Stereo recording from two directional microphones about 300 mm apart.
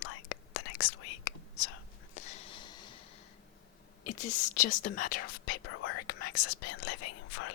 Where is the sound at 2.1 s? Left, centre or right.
Left.